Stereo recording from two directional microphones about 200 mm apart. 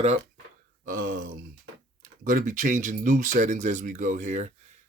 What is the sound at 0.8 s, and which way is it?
Speech, 40° right (ahead or behind).